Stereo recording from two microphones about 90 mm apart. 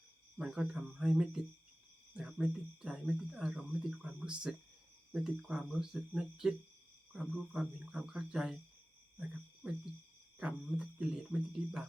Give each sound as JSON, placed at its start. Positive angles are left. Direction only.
{"t": 0.3, "sound": "speech", "side_deg": -10}
{"t": 9.6, "sound": "speech", "side_deg": -15}